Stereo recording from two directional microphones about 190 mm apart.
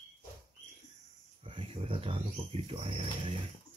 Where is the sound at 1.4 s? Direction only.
30° right (ahead or behind).